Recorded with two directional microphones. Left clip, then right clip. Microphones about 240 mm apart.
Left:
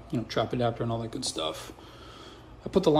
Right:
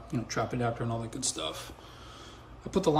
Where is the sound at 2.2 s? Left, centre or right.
Right.